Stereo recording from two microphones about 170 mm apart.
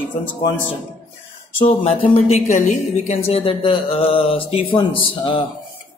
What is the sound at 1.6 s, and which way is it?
Speech, 35° left (ahead or behind).